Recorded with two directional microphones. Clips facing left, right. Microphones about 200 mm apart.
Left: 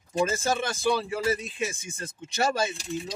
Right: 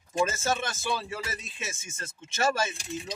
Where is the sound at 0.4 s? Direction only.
15° left (ahead or behind).